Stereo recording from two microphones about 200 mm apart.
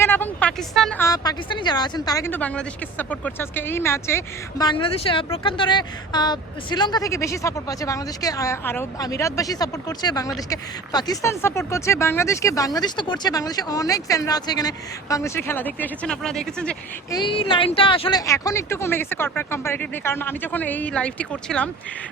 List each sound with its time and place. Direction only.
0.0 s a sound: 10° left (ahead or behind)
1.0 s speech: 20° left (ahead or behind); by 16.7 s 5° left (ahead or behind)
17.1 s speech: 25° left (ahead or behind)
18.3 s speech: 15° left (ahead or behind)